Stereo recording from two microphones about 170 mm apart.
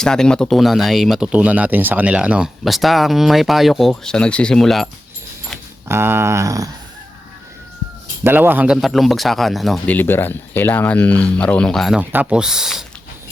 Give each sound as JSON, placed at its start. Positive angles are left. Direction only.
{"t": 0.0, "sound": "speech", "side_deg": 5}
{"t": 5.9, "sound": "speech", "side_deg": -15}
{"t": 8.2, "sound": "speech", "side_deg": -10}